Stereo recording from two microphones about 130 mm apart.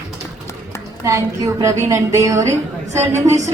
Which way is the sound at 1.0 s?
25° right (ahead or behind).